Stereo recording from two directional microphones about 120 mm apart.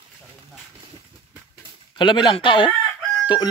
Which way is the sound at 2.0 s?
40° left (ahead or behind).